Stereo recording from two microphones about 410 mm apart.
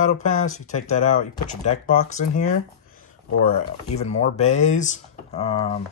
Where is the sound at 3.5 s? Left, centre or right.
Centre.